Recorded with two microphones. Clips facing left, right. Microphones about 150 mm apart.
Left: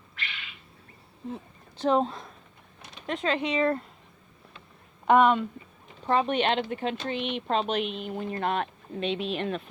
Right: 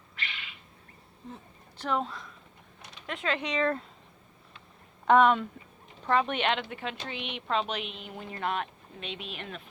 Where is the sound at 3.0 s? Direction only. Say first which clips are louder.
Left 4 dB; 25° left (ahead or behind).